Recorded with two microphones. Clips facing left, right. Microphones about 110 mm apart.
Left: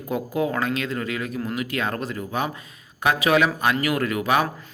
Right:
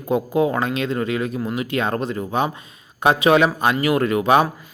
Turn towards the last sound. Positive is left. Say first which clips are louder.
# right 5 dB
turn(degrees=-25)  # may be behind; listen again after turning